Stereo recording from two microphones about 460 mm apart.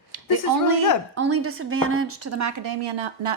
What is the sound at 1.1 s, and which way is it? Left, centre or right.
A woman's voice, right.